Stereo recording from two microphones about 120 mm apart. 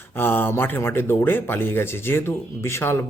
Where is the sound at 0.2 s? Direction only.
15° left (ahead or behind).